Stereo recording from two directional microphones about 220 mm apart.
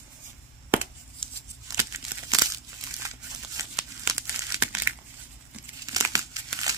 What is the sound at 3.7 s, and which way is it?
Crumpling, 10° right (ahead or behind).